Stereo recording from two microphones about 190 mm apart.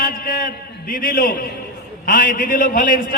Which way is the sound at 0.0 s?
50° left (ahead or behind).